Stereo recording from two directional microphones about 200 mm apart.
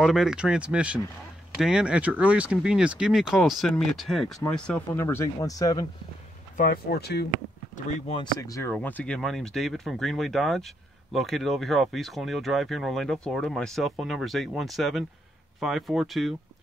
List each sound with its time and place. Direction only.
0.0 s speech: centre (ahead or behind); by 5.9 s 20° left (ahead or behind)
6.5 s speech: 45° left (ahead or behind)
8.1 s speech: 20° left (ahead or behind); by 16.3 s centre (ahead or behind)